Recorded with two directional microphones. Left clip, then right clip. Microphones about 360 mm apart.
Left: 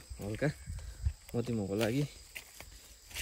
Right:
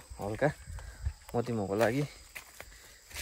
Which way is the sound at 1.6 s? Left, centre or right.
Centre.